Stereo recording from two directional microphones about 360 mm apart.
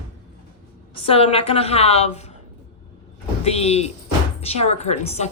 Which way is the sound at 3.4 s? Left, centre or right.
Centre.